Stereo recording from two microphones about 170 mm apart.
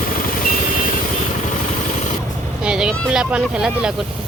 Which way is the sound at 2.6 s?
5° right (ahead or behind).